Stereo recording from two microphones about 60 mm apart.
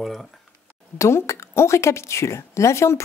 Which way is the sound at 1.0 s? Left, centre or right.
Left.